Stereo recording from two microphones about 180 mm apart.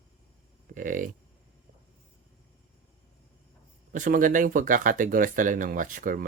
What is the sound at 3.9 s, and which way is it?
Speech, 45° right (ahead or behind).